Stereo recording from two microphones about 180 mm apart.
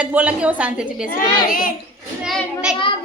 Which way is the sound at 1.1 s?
50° left (ahead or behind).